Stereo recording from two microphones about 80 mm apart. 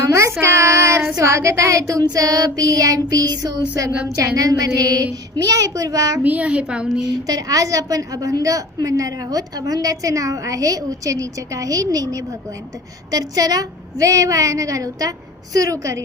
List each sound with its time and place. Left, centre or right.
0.0 s child singing: right
4.4 s a woman's voice: right
6.2 s a child's voice: centre
7.3 s a woman's voice: right